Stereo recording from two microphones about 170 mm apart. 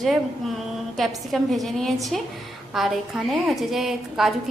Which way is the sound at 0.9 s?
Centre (ahead or behind).